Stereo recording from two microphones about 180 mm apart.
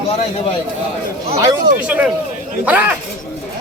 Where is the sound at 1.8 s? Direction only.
5° right (ahead or behind).